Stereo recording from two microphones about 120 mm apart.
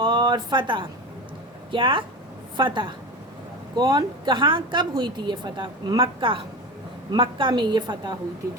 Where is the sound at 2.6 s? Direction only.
40° right (ahead or behind).